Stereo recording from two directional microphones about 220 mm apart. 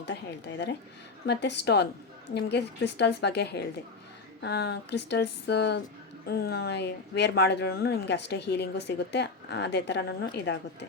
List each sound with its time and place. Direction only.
1.3 s speech: 50° left (ahead or behind)